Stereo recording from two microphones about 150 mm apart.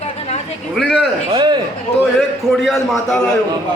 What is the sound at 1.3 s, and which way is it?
Speech, 30° right (ahead or behind).